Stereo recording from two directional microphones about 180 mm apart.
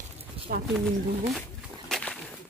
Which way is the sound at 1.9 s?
5° left (ahead or behind).